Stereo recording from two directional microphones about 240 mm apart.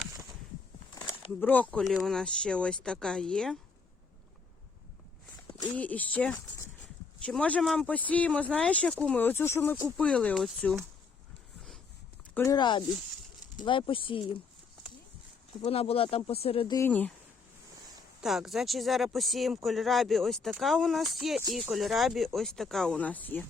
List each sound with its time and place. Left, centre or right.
1.4 s speech: centre
5.7 s speech: centre
12.3 s speech: centre
15.6 s speech: left; by 17.1 s centre
18.2 s speech: centre